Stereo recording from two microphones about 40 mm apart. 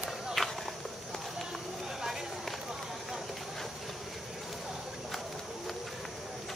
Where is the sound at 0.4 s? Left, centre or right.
Centre.